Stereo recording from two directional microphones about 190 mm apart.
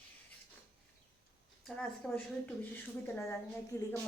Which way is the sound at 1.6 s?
5° left (ahead or behind).